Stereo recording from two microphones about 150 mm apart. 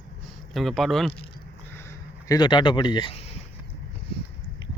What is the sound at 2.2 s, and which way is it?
Speech, 30° left (ahead or behind).